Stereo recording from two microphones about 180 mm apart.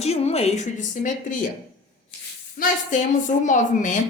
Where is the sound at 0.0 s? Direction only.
35° left (ahead or behind).